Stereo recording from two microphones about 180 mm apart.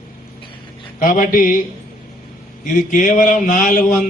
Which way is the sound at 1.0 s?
50° left (ahead or behind).